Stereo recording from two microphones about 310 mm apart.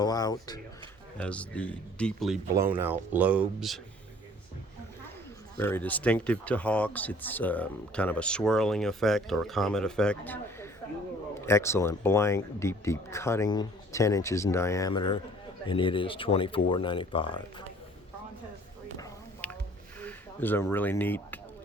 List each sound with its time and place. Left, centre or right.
0.0 s speech: centre
5.5 s speech: centre
18.9 s a sound: centre
20.0 s speech: centre